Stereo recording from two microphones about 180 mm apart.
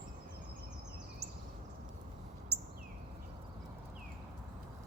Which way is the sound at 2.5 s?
65° right (ahead or behind).